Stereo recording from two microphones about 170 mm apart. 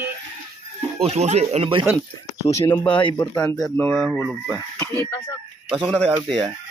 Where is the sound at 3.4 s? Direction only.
5° left (ahead or behind).